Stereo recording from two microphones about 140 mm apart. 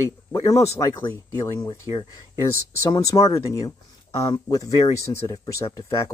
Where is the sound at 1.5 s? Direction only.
30° left (ahead or behind).